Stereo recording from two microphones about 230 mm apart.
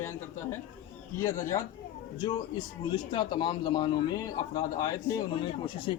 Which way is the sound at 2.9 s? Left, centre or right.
Centre.